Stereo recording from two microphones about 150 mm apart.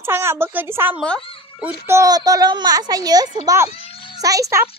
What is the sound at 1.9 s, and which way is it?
A child's voice, 25° right (ahead or behind).